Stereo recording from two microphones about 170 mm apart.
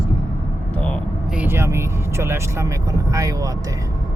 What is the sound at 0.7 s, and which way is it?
Speech, 10° left (ahead or behind).